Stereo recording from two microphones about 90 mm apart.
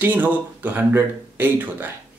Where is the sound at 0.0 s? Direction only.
20° right (ahead or behind).